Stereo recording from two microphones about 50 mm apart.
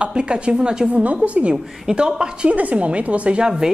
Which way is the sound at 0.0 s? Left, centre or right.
Centre.